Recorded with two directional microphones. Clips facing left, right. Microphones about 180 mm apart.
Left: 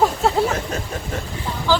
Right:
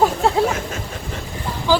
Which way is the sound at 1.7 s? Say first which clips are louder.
Right 2 dB; 15° right (ahead or behind).